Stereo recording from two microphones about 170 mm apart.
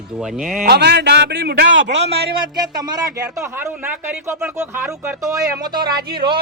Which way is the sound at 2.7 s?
25° right (ahead or behind).